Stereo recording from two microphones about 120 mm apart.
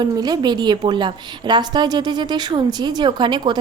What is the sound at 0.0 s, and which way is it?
A woman's voice, 35° right (ahead or behind).